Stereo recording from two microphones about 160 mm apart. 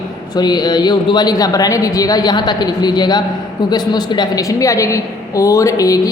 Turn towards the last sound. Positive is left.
turn(degrees=20)  # may be behind; listen again after turning